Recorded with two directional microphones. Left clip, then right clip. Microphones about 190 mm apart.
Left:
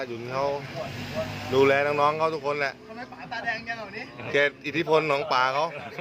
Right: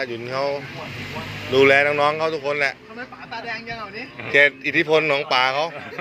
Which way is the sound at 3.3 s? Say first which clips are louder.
Even; 25° left (ahead or behind).